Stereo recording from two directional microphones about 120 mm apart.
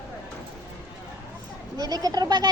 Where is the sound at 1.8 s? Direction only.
30° right (ahead or behind).